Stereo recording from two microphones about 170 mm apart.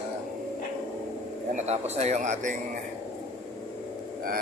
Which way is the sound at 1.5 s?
40° right (ahead or behind).